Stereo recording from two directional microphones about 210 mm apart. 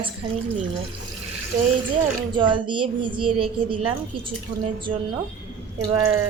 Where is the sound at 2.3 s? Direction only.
25° right (ahead or behind).